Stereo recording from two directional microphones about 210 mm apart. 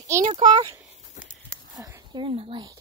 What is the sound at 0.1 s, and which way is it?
Speech, 20° right (ahead or behind).